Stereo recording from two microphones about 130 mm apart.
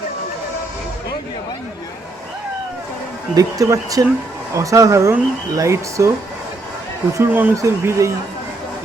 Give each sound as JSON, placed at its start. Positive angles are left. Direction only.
{"t": 3.3, "sound": "speech", "side_deg": -25}
{"t": 7.2, "sound": "speech", "side_deg": -15}
{"t": 7.5, "sound": "speech", "side_deg": -25}